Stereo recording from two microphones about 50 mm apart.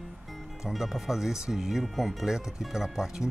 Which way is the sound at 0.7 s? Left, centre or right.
Centre.